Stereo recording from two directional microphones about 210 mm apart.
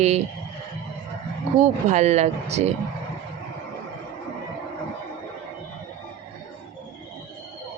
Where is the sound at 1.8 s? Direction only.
35° right (ahead or behind).